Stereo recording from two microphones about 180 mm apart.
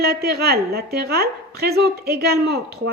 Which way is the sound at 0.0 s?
60° right (ahead or behind).